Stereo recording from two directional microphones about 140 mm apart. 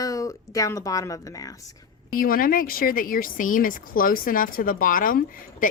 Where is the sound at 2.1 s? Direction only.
90° left.